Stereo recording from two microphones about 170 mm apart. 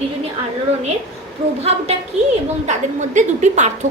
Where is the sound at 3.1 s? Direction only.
45° right (ahead or behind).